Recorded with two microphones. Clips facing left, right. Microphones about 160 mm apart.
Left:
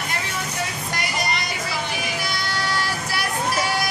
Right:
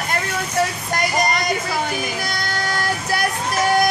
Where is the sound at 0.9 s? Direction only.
45° right (ahead or behind).